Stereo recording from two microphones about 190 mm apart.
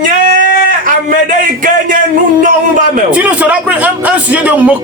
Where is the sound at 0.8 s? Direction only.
45° right (ahead or behind).